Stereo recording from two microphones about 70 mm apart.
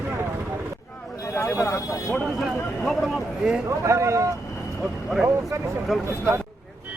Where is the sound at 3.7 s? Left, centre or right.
Right.